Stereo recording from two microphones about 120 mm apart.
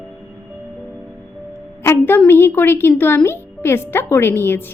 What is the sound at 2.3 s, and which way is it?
A woman's voice, 20° left (ahead or behind).